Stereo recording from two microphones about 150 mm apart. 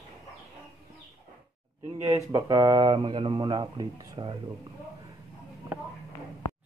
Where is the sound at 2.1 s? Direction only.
20° right (ahead or behind).